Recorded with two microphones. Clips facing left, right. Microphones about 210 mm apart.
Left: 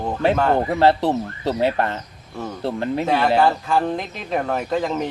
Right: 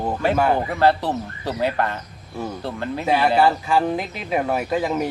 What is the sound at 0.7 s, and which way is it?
Speech, 20° left (ahead or behind).